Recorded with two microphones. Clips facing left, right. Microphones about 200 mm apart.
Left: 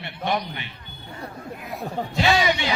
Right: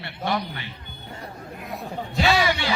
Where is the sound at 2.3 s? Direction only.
20° left (ahead or behind).